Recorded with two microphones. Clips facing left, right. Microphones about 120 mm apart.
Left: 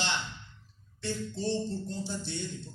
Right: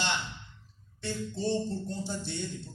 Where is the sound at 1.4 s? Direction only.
15° right (ahead or behind).